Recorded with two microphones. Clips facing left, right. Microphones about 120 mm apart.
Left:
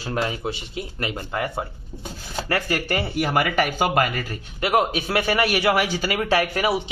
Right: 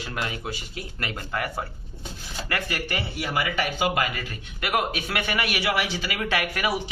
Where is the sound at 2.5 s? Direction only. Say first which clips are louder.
Left 6 dB; 40° left (ahead or behind).